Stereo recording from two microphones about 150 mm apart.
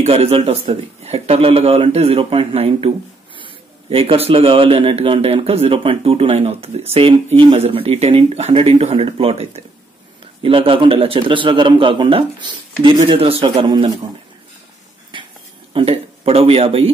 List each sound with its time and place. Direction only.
0.0 s speech: 40° right (ahead or behind)
15.1 s a sound: 30° right (ahead or behind)
15.7 s speech: 40° right (ahead or behind)